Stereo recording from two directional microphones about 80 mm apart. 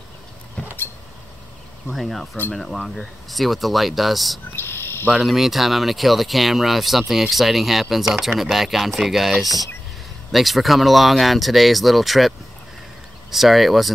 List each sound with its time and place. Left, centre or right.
0.6 s vehicle: centre
1.9 s speech: centre
4.6 s bird: left
5.2 s speech: centre